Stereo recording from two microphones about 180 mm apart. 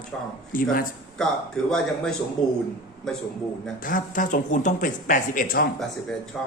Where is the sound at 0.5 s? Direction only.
50° left (ahead or behind).